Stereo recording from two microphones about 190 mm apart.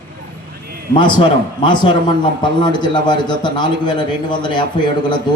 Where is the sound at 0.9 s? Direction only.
25° left (ahead or behind).